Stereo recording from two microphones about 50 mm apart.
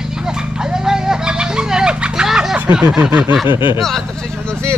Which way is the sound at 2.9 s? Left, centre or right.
Centre.